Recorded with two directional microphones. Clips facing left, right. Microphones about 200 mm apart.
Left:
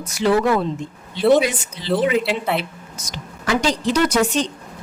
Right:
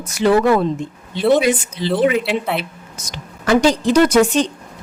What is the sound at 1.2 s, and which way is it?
Speech, centre (ahead or behind).